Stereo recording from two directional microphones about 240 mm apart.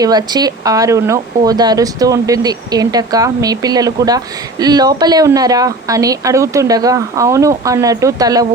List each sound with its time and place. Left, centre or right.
0.0 s speech: centre